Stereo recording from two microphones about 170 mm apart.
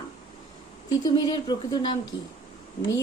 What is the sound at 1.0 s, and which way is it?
Speech, 25° left (ahead or behind).